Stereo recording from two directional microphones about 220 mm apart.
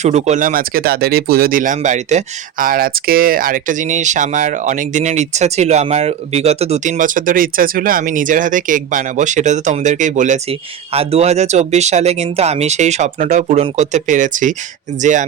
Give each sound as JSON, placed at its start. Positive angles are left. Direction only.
{"t": 0.0, "sound": "speech", "side_deg": -30}